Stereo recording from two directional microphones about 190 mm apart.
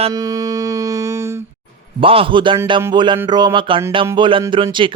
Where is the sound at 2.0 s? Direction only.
30° right (ahead or behind).